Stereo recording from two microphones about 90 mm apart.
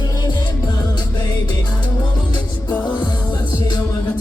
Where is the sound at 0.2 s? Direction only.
55° left (ahead or behind).